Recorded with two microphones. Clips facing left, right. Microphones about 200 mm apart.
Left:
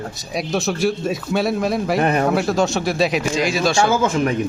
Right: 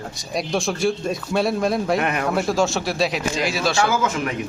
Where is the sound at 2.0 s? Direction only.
35° left (ahead or behind).